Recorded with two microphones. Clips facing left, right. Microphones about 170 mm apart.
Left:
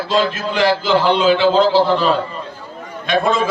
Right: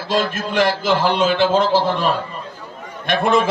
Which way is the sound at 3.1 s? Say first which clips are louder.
Even; 55° right (ahead or behind).